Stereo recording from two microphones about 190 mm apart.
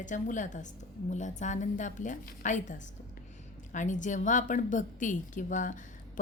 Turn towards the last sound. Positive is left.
turn(degrees=45)  # may be behind; listen again after turning